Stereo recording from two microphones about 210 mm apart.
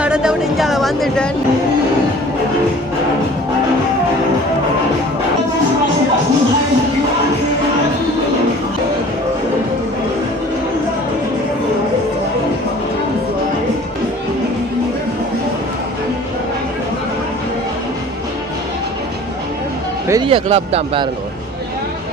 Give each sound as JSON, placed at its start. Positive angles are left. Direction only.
{"t": 0.0, "sound": "a woman's voice", "side_deg": -5}
{"t": 20.1, "sound": "speech", "side_deg": -20}